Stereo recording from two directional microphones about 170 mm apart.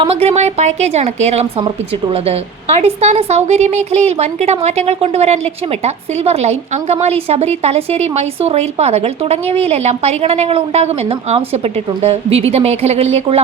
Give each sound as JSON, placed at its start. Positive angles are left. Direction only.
{"t": 0.0, "sound": "a woman's voice", "side_deg": -35}
{"t": 2.7, "sound": "a woman's voice", "side_deg": -40}